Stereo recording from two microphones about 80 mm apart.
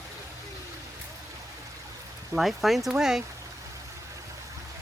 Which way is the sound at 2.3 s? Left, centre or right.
Centre.